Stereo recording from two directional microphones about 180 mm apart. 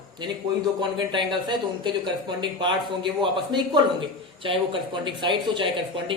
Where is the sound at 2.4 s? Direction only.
25° right (ahead or behind).